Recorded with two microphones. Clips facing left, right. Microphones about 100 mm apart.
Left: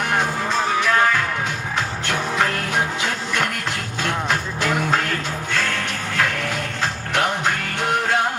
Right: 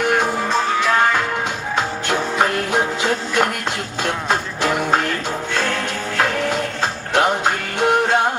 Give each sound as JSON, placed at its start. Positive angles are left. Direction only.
{"t": 1.7, "sound": "music", "side_deg": -20}